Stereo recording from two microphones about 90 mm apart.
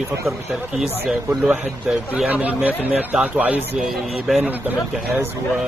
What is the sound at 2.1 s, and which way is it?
A man's voice, 15° right (ahead or behind).